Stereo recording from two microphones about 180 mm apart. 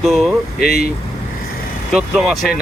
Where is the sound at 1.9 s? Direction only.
Centre (ahead or behind).